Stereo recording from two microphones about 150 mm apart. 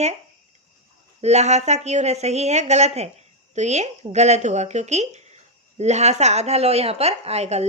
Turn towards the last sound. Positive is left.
turn(degrees=-45)  # may be behind; listen again after turning